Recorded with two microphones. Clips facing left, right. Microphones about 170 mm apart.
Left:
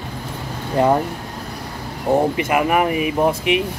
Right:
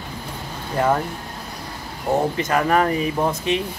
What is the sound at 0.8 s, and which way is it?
Speech, 20° left (ahead or behind).